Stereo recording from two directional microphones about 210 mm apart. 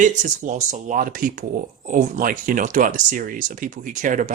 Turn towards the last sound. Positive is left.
turn(degrees=-40)  # may be behind; listen again after turning